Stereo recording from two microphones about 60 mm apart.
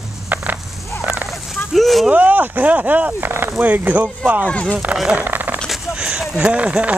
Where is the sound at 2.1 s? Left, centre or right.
Right.